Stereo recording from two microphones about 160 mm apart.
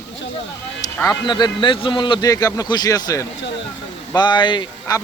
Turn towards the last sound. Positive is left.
turn(degrees=30)  # may be behind; listen again after turning